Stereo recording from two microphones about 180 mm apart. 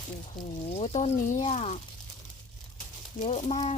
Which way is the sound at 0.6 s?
35° left (ahead or behind).